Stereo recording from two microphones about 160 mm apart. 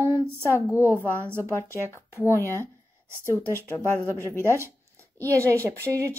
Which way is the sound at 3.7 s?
15° right (ahead or behind).